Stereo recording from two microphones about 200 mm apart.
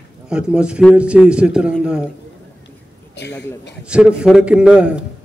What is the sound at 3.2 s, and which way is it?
Speech, 55° left (ahead or behind).